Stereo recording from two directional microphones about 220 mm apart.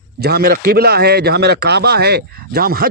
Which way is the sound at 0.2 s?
45° right (ahead or behind).